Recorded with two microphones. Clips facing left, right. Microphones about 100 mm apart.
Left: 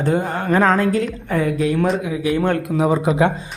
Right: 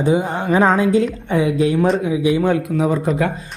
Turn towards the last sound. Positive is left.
turn(degrees=5)  # may be behind; listen again after turning